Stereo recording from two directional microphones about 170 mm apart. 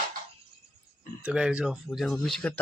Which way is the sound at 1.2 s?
5° right (ahead or behind).